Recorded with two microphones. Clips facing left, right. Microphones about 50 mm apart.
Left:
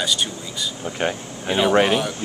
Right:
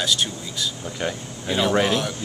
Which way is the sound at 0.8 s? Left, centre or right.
Left.